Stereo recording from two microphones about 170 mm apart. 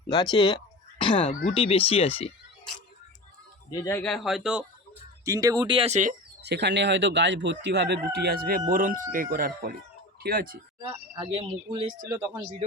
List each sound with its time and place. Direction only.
0.1 s speech: 25° left (ahead or behind)
3.7 s speech: 15° left (ahead or behind)
4.0 s speech: centre (ahead or behind)
5.2 s speech: 20° right (ahead or behind); by 6.1 s 45° right (ahead or behind)
6.4 s speech: 80° right; by 9.7 s 60° right (ahead or behind)
10.2 s speech: 70° right (ahead or behind)
11.1 s speech: 30° right (ahead or behind)
12.1 s speech: 15° right (ahead or behind)